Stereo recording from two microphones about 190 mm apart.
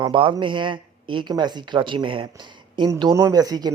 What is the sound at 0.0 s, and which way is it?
Speech, 25° right (ahead or behind).